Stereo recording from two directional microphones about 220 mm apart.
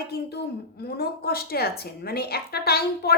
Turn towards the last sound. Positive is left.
turn(degrees=45)  # may be behind; listen again after turning